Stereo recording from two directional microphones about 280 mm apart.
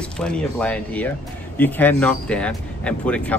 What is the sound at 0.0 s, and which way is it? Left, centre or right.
Speech, centre.